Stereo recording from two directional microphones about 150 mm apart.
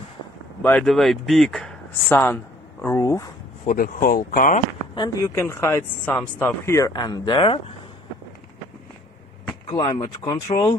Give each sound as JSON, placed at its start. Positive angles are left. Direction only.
{"t": 0.6, "sound": "speech", "side_deg": 10}
{"t": 3.6, "sound": "speech", "side_deg": 70}
{"t": 4.9, "sound": "speech", "side_deg": 25}
{"t": 9.7, "sound": "speech", "side_deg": 25}